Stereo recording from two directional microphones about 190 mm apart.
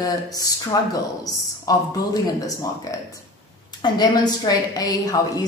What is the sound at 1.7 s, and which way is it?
A woman's voice, 20° left (ahead or behind).